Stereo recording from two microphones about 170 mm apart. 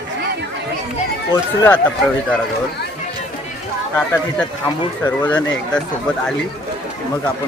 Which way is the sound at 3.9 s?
10° left (ahead or behind).